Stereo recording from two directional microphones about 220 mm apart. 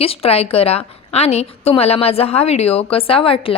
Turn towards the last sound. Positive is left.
turn(degrees=25)  # may be behind; listen again after turning